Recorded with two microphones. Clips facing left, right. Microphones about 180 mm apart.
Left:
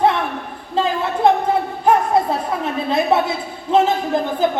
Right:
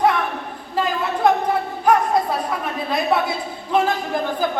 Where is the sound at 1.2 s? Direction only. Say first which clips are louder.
Left 3 dB; 25° left (ahead or behind).